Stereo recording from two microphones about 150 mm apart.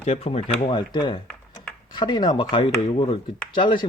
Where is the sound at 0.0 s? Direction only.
45° left (ahead or behind).